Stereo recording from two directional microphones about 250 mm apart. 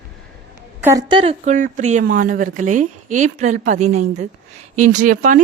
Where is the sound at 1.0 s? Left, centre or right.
Right.